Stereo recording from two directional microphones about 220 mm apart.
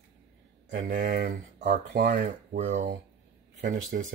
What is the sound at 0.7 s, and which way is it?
Speech, 40° right (ahead or behind).